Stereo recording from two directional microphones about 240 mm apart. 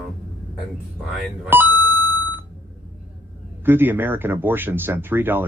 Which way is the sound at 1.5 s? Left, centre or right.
Centre.